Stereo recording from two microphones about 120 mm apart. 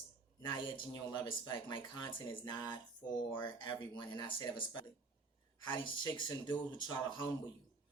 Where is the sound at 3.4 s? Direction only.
40° left (ahead or behind).